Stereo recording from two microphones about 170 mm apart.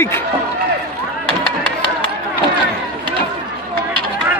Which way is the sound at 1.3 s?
30° right (ahead or behind).